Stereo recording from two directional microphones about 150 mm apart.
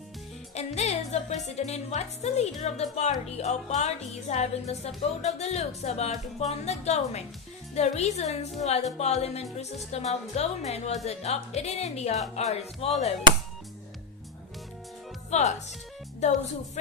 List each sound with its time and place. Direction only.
0.5 s speech: 45° left (ahead or behind)
15.3 s speech: 50° left (ahead or behind)